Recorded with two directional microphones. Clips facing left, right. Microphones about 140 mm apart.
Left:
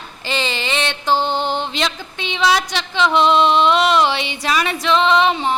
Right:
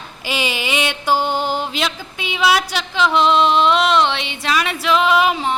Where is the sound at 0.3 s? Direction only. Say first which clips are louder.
Even; 10° right (ahead or behind).